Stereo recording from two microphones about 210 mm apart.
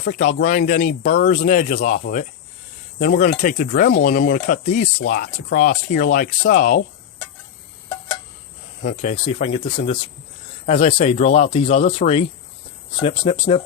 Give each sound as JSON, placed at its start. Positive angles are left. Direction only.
{"t": 0.0, "sound": "speech", "side_deg": 40}
{"t": 8.8, "sound": "speech", "side_deg": 35}
{"t": 13.5, "sound": "speech", "side_deg": 25}